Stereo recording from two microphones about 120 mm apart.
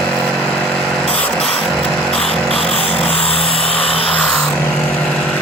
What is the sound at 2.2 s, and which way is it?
Music, 55° left (ahead or behind).